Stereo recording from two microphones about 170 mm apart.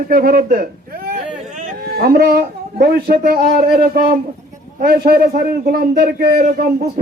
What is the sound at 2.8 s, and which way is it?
A man's voice, 65° right (ahead or behind).